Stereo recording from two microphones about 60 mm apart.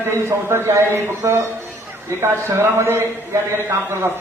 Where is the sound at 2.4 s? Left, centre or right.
Right.